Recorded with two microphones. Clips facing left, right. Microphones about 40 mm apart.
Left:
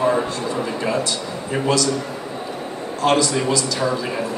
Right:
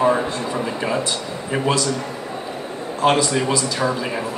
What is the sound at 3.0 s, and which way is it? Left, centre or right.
Speech, right.